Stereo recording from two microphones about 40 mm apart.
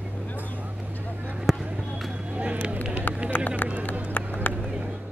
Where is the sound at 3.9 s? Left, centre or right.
Left.